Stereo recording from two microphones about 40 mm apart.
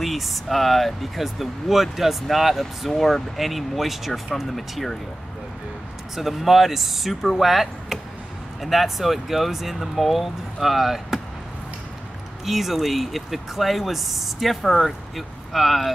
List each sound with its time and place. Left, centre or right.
0.0 s speech: centre
6.1 s speech: centre
12.4 s speech: centre